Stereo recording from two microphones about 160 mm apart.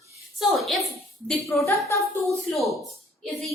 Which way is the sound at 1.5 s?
20° left (ahead or behind).